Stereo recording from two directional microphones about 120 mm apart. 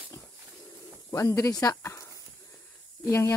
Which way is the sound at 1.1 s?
25° left (ahead or behind).